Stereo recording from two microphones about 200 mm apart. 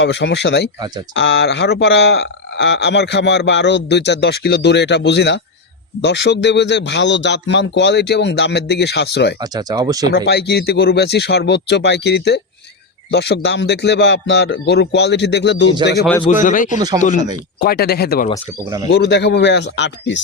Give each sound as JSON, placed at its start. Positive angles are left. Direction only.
{"t": 0.0, "sound": "speech", "side_deg": 65}
{"t": 9.4, "sound": "speech", "side_deg": -20}
{"t": 10.2, "sound": "speech", "side_deg": 55}
{"t": 16.3, "sound": "speech", "side_deg": 40}
{"t": 18.6, "sound": "speech", "side_deg": -20}
{"t": 18.9, "sound": "speech", "side_deg": 55}